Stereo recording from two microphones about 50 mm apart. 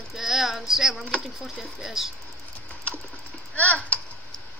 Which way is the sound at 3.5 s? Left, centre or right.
Left.